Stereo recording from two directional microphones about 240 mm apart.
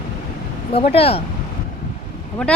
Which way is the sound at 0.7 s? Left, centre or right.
Left.